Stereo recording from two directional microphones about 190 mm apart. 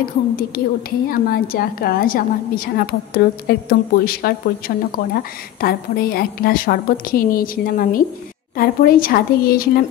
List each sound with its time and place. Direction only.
0.4 s a woman's voice: 50° left (ahead or behind)